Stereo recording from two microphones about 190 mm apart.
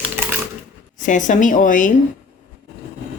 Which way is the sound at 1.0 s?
40° left (ahead or behind).